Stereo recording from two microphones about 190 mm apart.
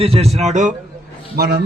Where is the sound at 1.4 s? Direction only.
60° right (ahead or behind).